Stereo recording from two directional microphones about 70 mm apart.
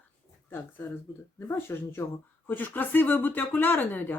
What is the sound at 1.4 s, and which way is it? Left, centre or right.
Speech, left.